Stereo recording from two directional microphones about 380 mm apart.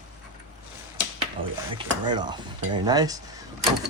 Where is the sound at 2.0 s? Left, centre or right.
Centre.